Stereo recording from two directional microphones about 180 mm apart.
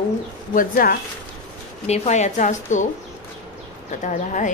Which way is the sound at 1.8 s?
35° left (ahead or behind).